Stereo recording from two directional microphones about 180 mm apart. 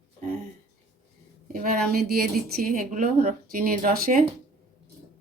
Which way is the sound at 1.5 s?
50° right (ahead or behind).